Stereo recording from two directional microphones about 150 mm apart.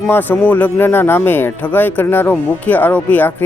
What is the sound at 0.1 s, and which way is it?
Speech, 10° left (ahead or behind).